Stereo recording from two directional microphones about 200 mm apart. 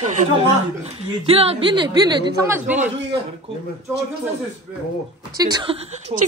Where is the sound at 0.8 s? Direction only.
30° right (ahead or behind); by 2.9 s 10° right (ahead or behind).